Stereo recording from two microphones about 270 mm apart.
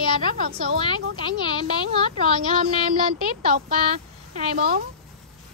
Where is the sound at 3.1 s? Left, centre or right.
Right.